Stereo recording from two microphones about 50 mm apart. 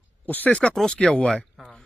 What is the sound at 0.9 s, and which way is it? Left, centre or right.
Speech, left.